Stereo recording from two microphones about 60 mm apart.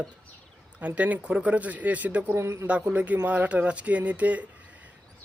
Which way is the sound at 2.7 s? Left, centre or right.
Right.